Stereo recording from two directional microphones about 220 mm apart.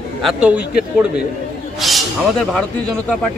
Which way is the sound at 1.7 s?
Centre (ahead or behind).